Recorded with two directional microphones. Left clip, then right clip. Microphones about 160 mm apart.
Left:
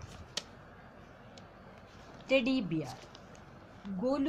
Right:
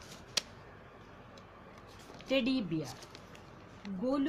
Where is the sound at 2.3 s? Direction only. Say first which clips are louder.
Left 3 dB; 25° left (ahead or behind).